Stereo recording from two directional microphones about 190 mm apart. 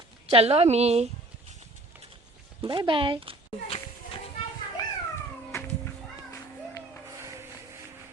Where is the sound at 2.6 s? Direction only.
25° right (ahead or behind).